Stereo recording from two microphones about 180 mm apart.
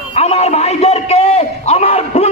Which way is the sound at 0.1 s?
35° left (ahead or behind).